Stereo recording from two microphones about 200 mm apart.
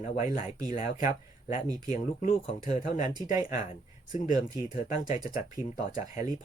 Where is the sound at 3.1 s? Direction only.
20° right (ahead or behind).